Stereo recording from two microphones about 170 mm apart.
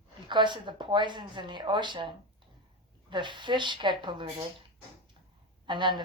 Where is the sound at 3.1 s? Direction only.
30° right (ahead or behind).